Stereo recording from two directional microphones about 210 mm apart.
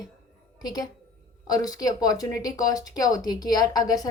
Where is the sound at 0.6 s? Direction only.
20° left (ahead or behind).